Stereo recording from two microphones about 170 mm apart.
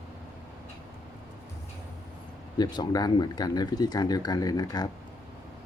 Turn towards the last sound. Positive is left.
turn(degrees=20)  # may be behind; listen again after turning